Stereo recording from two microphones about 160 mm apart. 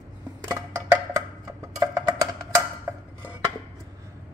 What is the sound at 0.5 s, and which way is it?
Wood block, 20° right (ahead or behind).